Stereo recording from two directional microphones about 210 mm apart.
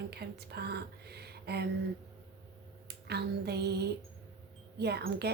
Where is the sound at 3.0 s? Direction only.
50° right (ahead or behind).